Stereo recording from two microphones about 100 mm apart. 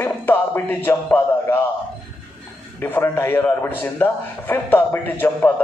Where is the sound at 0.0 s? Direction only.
20° left (ahead or behind).